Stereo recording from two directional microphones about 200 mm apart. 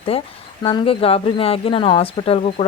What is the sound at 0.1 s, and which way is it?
Speech, 30° left (ahead or behind).